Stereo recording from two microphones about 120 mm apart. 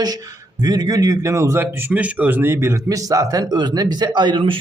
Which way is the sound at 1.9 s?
15° right (ahead or behind).